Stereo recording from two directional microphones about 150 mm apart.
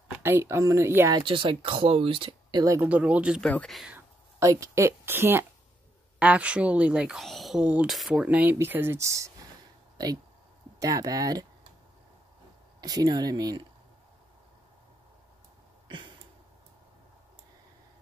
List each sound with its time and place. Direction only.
0.2 s speech: 15° right (ahead or behind)
1.2 s speech: 35° right (ahead or behind)
2.6 s speech: 20° right (ahead or behind)
2.9 s speech: 10° right (ahead or behind)
3.4 s speech: 5° left (ahead or behind)
3.9 s speech: 20° right (ahead or behind)
10.8 s speech: 25° right (ahead or behind)
12.8 s speech: 25° right (ahead or behind)
15.9 s a sound: 30° right (ahead or behind)